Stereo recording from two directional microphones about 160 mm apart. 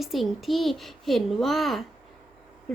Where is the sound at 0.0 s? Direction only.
Centre (ahead or behind).